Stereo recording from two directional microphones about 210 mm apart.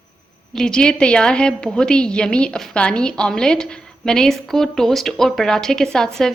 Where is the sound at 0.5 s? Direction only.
5° left (ahead or behind).